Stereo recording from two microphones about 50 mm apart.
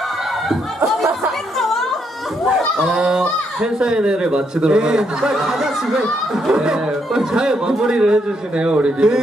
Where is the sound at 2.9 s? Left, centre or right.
Centre.